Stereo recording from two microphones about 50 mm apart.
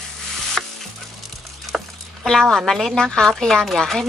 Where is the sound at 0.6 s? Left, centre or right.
Centre.